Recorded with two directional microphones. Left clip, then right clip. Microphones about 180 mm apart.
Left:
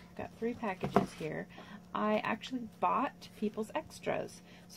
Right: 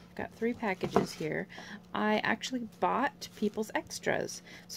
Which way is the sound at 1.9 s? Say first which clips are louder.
Right 3 dB; 50° right (ahead or behind).